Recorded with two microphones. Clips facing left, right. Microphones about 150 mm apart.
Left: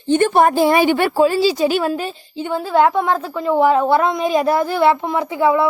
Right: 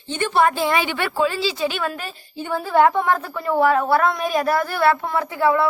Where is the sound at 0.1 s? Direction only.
45° left (ahead or behind).